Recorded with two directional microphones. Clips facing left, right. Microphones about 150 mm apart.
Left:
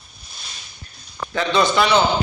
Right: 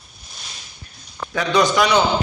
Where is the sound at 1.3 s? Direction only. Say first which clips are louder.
Right 1 dB; 10° right (ahead or behind).